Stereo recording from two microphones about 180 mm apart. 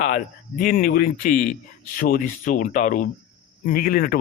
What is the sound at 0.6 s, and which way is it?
A man's voice, 50° left (ahead or behind).